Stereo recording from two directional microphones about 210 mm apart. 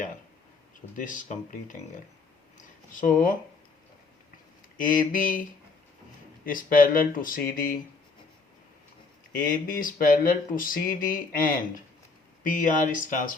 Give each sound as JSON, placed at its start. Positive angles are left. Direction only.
{"t": 0.9, "sound": "speech", "side_deg": 40}
{"t": 2.6, "sound": "a sound", "side_deg": 40}
{"t": 4.8, "sound": "speech", "side_deg": 40}
{"t": 9.3, "sound": "speech", "side_deg": 40}